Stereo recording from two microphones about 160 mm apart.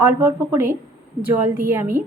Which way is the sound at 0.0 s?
15° right (ahead or behind).